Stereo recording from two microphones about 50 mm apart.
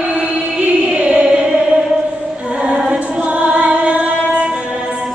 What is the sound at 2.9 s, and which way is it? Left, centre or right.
Singing, right.